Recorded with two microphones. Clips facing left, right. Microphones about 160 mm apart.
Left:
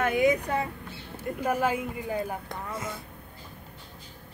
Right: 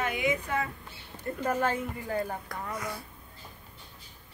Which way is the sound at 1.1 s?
10° left (ahead or behind).